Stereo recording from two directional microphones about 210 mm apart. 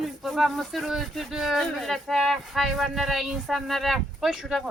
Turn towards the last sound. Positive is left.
turn(degrees=0)  # may be behind; listen again after turning